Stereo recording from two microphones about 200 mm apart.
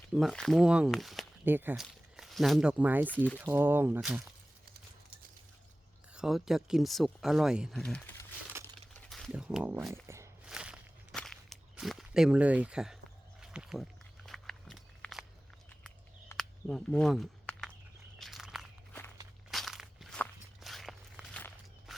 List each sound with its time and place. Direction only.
0.1 s speech: centre (ahead or behind)
6.1 s speech: centre (ahead or behind)
9.0 s a sound: centre (ahead or behind); by 10.5 s 15° right (ahead or behind)
10.5 s walk: 5° right (ahead or behind)
16.4 s a sound: centre (ahead or behind)
18.2 s walk: centre (ahead or behind)